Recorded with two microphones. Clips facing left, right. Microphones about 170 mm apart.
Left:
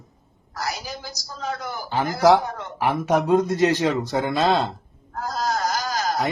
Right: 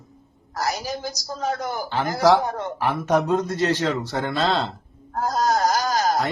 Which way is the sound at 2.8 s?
10° left (ahead or behind).